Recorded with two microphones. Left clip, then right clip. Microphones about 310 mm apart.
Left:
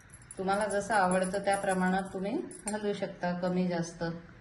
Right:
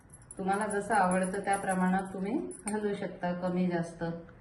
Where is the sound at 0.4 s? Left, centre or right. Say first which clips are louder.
Left 1 dB; left.